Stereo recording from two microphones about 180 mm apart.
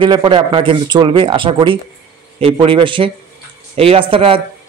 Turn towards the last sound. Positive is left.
turn(degrees=-30)  # may be behind; listen again after turning